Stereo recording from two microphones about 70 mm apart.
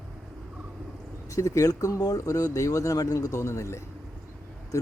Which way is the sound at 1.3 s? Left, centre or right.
Left.